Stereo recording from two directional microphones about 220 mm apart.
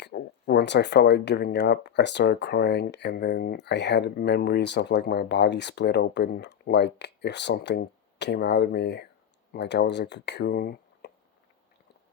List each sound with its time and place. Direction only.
0.0 s speech: 50° left (ahead or behind)